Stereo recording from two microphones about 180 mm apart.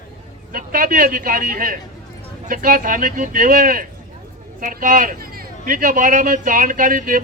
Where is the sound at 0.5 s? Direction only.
55° right (ahead or behind).